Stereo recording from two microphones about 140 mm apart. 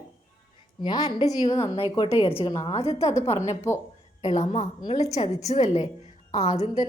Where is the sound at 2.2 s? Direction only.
40° left (ahead or behind).